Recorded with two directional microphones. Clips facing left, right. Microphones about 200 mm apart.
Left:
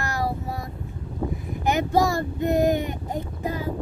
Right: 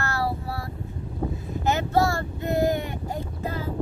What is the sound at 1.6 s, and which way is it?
Child singing, 15° left (ahead or behind).